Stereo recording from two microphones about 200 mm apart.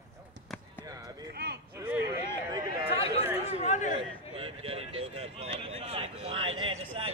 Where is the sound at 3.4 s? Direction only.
35° left (ahead or behind).